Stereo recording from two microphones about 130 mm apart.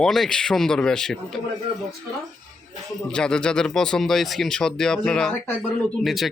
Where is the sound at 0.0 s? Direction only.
5° left (ahead or behind).